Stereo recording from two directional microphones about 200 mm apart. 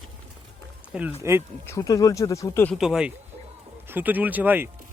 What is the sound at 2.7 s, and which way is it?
Speech, centre (ahead or behind).